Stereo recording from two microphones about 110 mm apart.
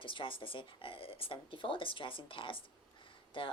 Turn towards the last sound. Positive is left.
turn(degrees=50)  # may be behind; listen again after turning